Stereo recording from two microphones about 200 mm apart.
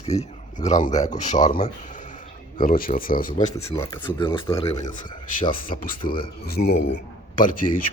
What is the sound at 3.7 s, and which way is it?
Speech, 15° left (ahead or behind).